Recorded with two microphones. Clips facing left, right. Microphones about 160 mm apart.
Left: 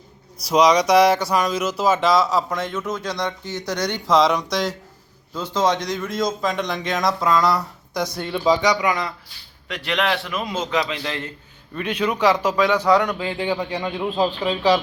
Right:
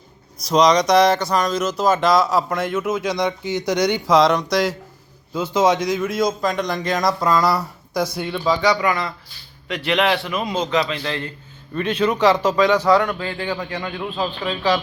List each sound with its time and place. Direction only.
0.4 s speech: 10° left (ahead or behind)
8.4 s a man's voice: 20° left (ahead or behind)
9.6 s a man's voice: centre (ahead or behind); by 14.8 s 20° left (ahead or behind)